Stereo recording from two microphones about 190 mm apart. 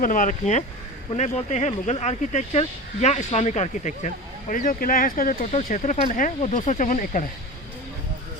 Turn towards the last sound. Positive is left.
turn(degrees=40)  # may be behind; listen again after turning